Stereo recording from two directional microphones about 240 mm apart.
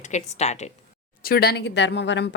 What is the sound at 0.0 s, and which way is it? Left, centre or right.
Speech, left.